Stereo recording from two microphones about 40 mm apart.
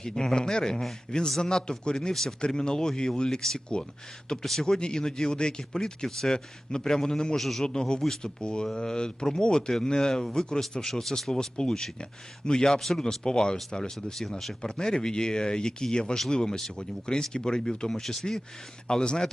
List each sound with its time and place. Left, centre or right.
0.0 s speech: centre
7.3 s a man's voice: centre
7.6 s speech: left
14.6 s speech: centre
18.0 s speech: centre
18.9 s speech: centre